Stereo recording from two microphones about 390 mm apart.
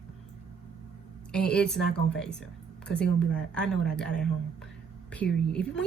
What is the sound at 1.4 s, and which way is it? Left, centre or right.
Speech, left.